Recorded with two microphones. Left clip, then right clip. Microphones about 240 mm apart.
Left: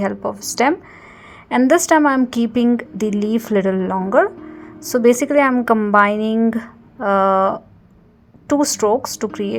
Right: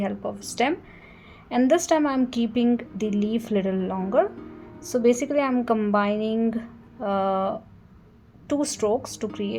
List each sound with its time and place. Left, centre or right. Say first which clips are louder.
0.0 s a woman's voice: left 8 dB; left
3.0 s speech: left 7 dB; left
3.3 s a woman's voice: left 8 dB; left